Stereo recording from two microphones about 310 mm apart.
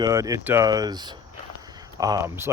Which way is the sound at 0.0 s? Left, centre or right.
Centre.